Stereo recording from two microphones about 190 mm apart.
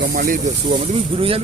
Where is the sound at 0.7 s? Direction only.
30° right (ahead or behind).